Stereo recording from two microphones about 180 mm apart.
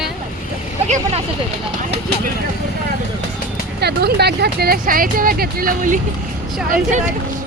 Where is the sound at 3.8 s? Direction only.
65° right (ahead or behind).